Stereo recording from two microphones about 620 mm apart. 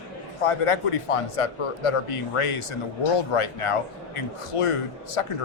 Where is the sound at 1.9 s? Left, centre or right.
Left.